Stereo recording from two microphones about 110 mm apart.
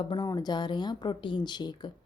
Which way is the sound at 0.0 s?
45° left (ahead or behind).